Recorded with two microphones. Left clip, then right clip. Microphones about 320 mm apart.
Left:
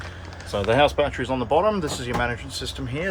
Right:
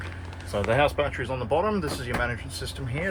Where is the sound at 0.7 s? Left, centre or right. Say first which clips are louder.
Left 4 dB; left.